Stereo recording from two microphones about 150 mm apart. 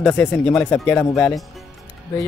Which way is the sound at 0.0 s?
5° left (ahead or behind).